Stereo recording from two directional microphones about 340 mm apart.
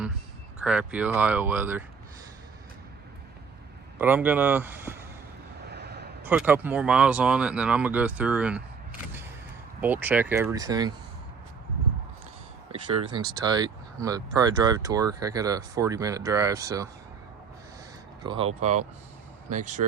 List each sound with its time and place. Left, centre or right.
0.6 s speech: centre
3.9 s speech: centre
5.6 s a sound: right
6.2 s speech: centre
9.8 s speech: centre
13.1 s speech: centre
18.2 s speech: centre